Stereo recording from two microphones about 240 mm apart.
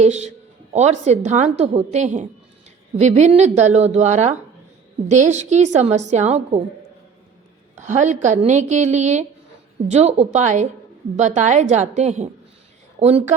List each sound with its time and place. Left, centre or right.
0.0 s a woman's voice: right
7.8 s a woman's voice: right